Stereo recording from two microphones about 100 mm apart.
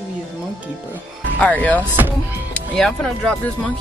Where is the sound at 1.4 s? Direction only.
15° left (ahead or behind).